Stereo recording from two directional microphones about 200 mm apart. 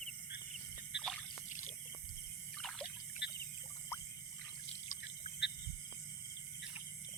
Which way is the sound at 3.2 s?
60° left (ahead or behind).